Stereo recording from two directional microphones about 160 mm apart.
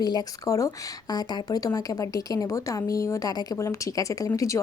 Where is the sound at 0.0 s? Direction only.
25° left (ahead or behind).